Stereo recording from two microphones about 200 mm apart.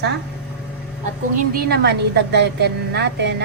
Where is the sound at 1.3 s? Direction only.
50° right (ahead or behind).